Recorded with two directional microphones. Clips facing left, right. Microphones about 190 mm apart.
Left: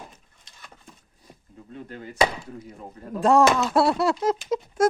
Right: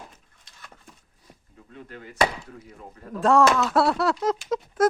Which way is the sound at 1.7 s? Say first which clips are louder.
Left 4 dB; 30° left (ahead or behind).